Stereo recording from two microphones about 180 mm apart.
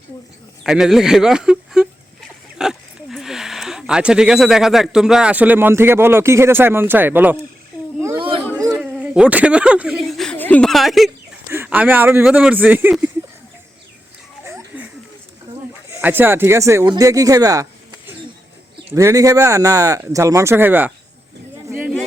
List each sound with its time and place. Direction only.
0.6 s speech: centre (ahead or behind)
8.1 s chatter: 30° right (ahead or behind)
8.7 s speech: 5° right (ahead or behind)
14.4 s a sound: 15° right (ahead or behind)
15.9 s speech: 10° right (ahead or behind)